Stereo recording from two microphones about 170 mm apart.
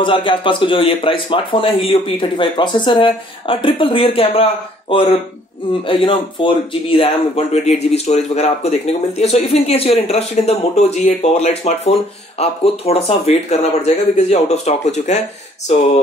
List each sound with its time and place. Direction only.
0.0 s speech: 30° left (ahead or behind)